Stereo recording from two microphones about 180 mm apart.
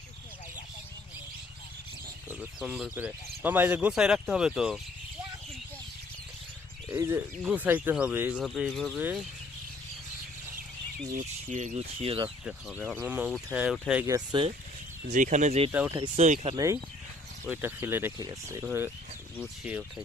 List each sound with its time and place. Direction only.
2.4 s speech: 5° right (ahead or behind)
6.9 s speech: 15° right (ahead or behind); by 9.0 s centre (ahead or behind)
9.0 s speech: 10° right (ahead or behind)
11.1 s speech: 45° right (ahead or behind)
11.9 s speech: 30° right (ahead or behind)
12.5 s speech: 5° right (ahead or behind)
14.3 s speech: 25° right (ahead or behind)
15.0 s speech: 45° right (ahead or behind)
15.7 s speech: 10° right (ahead or behind)
16.1 s speech: 40° right (ahead or behind)
17.5 s speech: 10° right (ahead or behind)